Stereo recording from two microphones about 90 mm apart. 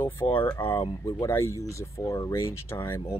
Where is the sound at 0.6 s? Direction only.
90° left.